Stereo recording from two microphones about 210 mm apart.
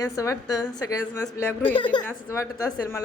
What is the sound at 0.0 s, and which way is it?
A man's voice, 15° left (ahead or behind).